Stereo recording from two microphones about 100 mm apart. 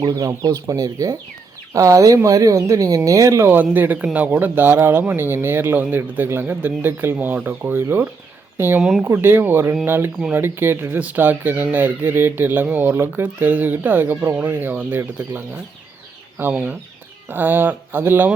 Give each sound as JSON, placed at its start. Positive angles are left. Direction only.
{"t": 0.0, "sound": "speech", "side_deg": -35}
{"t": 3.6, "sound": "speech", "side_deg": -20}
{"t": 8.8, "sound": "speech", "side_deg": -5}
{"t": 9.1, "sound": "speech", "side_deg": -20}
{"t": 16.4, "sound": "speech", "side_deg": -20}